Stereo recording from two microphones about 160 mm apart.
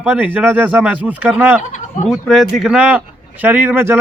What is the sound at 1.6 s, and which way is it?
Speech, 50° left (ahead or behind).